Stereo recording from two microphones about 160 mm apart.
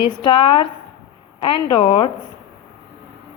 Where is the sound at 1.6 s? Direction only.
35° left (ahead or behind).